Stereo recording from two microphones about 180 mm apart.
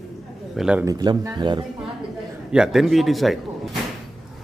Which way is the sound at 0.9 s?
20° right (ahead or behind).